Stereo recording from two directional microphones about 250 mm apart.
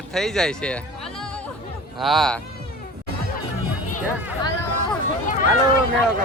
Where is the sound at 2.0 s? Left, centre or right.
Centre.